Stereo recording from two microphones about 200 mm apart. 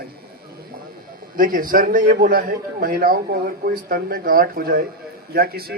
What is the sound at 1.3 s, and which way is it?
A man's voice, 45° right (ahead or behind).